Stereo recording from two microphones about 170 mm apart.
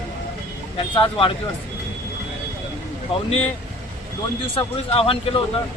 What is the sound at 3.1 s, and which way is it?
Speech, 35° left (ahead or behind).